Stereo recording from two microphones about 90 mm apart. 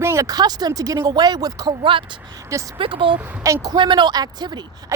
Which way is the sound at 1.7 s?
70° right (ahead or behind).